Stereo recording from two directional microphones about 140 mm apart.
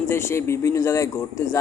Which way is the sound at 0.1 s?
20° left (ahead or behind).